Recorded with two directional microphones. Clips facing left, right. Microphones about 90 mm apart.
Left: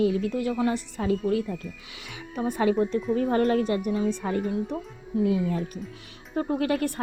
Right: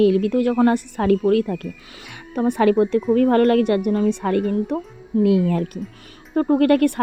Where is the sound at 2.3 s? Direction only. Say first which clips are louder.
Right 7 dB; 65° right (ahead or behind).